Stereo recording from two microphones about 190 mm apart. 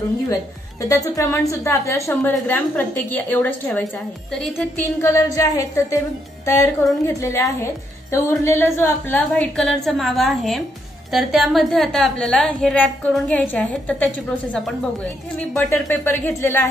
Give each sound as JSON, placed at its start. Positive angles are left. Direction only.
{"t": 0.8, "sound": "a woman's voice", "side_deg": 20}
{"t": 5.0, "sound": "a woman's voice", "side_deg": 15}